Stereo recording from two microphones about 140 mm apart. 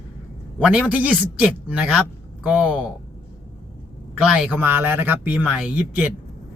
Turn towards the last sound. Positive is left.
turn(degrees=-5)  # may be behind; listen again after turning